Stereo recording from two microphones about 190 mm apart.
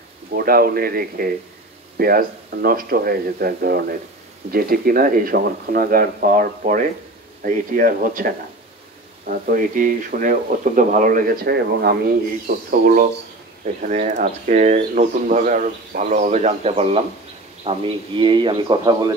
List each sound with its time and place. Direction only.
0.3 s a man's voice: 55° right (ahead or behind); by 19.1 s 20° right (ahead or behind)